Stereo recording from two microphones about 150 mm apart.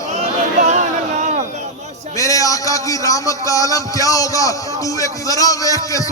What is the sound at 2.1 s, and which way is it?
Speech, 20° left (ahead or behind).